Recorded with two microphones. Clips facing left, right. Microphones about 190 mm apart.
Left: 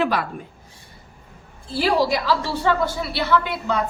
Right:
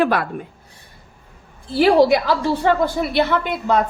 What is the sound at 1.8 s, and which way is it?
A woman's voice, 55° right (ahead or behind).